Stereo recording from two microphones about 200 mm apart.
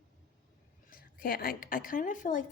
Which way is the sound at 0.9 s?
45° left (ahead or behind).